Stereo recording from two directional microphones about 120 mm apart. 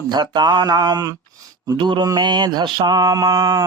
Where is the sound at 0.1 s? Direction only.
35° right (ahead or behind).